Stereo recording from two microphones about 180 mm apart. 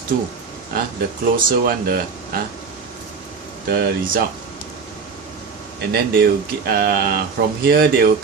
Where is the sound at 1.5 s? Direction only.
55° right (ahead or behind).